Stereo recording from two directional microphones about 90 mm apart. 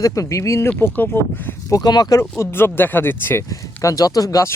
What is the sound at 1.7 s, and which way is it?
Speech, 50° left (ahead or behind).